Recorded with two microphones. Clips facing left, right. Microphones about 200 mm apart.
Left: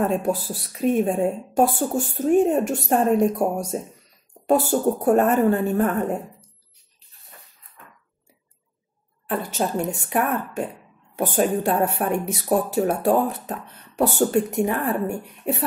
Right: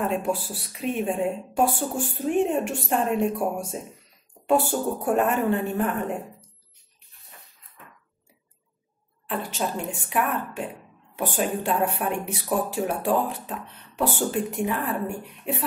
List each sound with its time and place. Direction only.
0.0 s speech: 40° left (ahead or behind)
9.3 s speech: 45° left (ahead or behind)